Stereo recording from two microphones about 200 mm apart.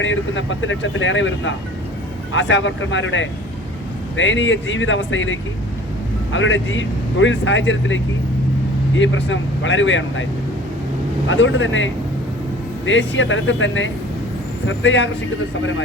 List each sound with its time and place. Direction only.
0.0 s speech: 70° left (ahead or behind)
11.3 s speech: 70° left (ahead or behind)